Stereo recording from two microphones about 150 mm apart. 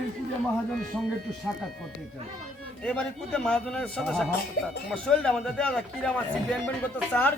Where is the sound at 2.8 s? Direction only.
5° left (ahead or behind).